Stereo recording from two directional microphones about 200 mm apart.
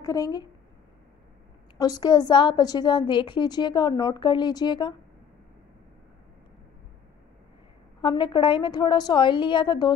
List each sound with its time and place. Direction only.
0.0 s a woman's voice: 15° left (ahead or behind)
1.8 s a woman's voice: 20° left (ahead or behind)
8.0 s a woman's voice: 25° left (ahead or behind)